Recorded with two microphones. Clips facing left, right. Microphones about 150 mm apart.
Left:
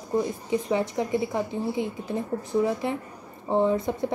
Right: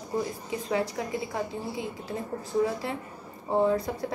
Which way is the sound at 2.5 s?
20° left (ahead or behind).